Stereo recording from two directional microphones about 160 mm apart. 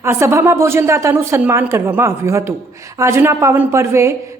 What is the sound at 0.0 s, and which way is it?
A woman's voice, 15° right (ahead or behind).